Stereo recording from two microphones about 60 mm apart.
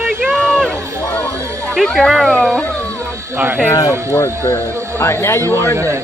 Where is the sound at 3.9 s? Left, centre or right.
Right.